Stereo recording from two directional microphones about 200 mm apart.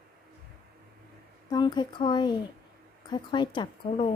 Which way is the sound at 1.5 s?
20° left (ahead or behind).